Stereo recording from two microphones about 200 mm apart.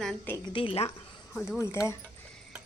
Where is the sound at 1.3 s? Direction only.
10° left (ahead or behind).